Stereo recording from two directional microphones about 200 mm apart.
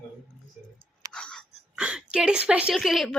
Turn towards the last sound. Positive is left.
turn(degrees=0)  # may be behind; listen again after turning